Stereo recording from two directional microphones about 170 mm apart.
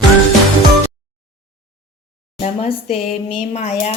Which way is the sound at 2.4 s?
40° left (ahead or behind).